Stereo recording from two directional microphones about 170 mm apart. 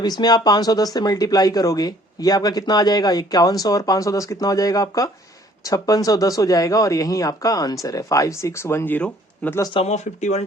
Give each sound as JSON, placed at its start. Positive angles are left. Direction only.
{"t": 0.0, "sound": "speech", "side_deg": 25}
{"t": 9.7, "sound": "speech", "side_deg": 40}